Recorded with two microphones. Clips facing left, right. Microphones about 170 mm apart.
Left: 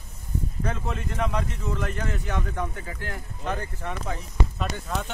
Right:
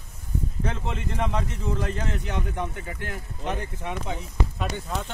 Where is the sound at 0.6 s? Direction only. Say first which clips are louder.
Left 1 dB; 25° right (ahead or behind).